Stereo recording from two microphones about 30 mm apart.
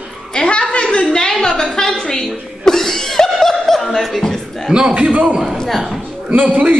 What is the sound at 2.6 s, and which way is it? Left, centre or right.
Laughter, centre.